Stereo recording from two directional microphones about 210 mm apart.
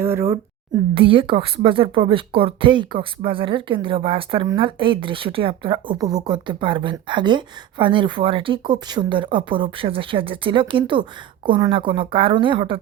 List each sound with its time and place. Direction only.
0.0 s speech: 10° right (ahead or behind)
0.9 s speech: 25° right (ahead or behind)